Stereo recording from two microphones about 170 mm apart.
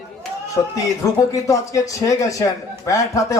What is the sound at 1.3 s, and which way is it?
Speech, 20° left (ahead or behind).